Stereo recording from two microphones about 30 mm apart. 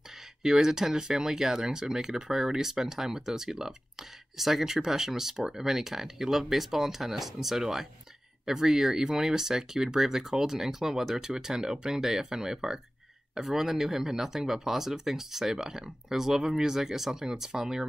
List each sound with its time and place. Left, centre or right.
0.4 s speech: centre